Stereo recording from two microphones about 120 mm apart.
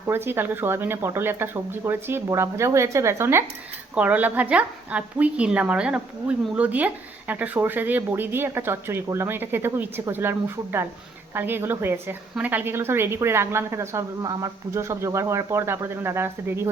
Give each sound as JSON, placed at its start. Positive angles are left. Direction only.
{"t": 0.1, "sound": "a woman's voice", "side_deg": -20}